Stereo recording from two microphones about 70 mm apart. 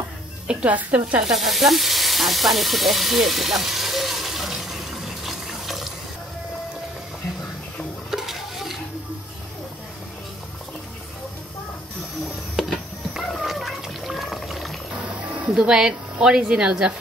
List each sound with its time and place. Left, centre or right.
0.5 s speech: centre
1.2 s sizzle: centre
8.1 s stir: centre
12.5 s cat: centre
15.0 s a woman's voice: centre